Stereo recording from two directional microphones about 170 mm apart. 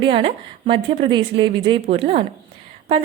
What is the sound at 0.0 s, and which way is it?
A woman's voice, 30° right (ahead or behind).